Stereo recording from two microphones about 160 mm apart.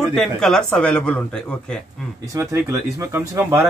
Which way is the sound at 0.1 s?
5° left (ahead or behind).